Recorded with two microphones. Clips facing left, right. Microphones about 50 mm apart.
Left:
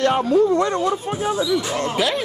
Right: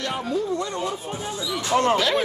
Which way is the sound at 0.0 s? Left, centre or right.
Left.